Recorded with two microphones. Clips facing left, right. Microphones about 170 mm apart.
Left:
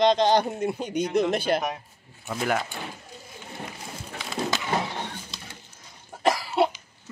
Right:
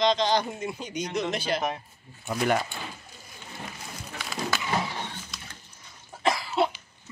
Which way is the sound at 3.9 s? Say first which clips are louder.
Left 2 dB; 25° left (ahead or behind).